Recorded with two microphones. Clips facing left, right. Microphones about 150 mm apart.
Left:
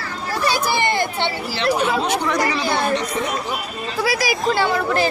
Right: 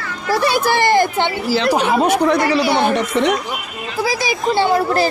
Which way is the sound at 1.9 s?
55° right (ahead or behind).